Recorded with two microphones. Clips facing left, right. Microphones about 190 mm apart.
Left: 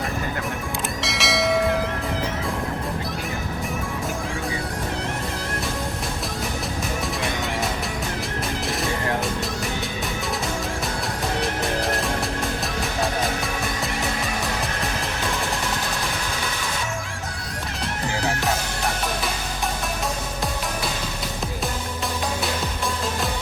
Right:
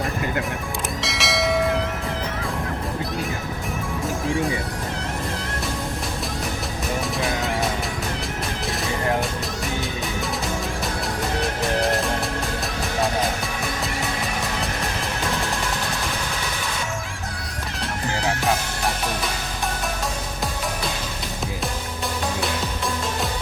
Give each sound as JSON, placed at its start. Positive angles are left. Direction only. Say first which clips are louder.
{"t": 1.0, "sound": "church bell", "louder": "left 1 dB", "side_deg": 0}